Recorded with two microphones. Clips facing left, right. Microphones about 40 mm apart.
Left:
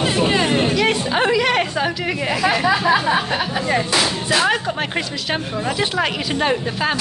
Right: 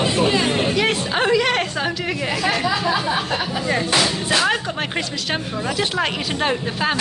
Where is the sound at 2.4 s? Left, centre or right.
Centre.